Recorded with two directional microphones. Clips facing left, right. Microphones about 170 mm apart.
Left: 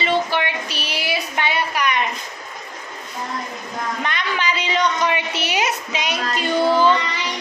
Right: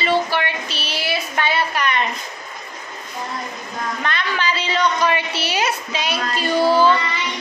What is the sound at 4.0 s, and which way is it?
A woman's voice, 15° left (ahead or behind).